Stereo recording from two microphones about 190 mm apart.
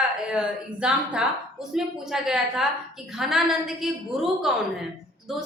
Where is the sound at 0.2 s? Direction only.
5° right (ahead or behind).